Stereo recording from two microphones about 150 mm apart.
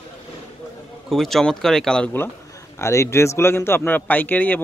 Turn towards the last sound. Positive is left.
turn(degrees=10)  # may be behind; listen again after turning